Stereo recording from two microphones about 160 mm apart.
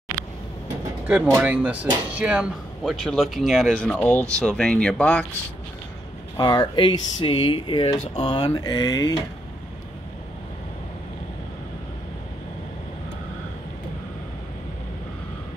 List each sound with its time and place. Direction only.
1.3 s speech: 10° right (ahead or behind); by 5.2 s 5° left (ahead or behind)
6.3 s speech: 25° left (ahead or behind)